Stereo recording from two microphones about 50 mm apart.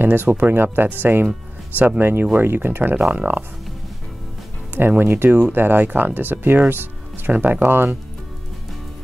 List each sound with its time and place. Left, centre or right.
0.0 s speech: right
2.0 s speech: right
4.7 s speech: right
7.6 s speech: right